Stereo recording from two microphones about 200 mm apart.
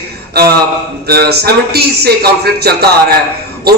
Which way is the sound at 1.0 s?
50° right (ahead or behind).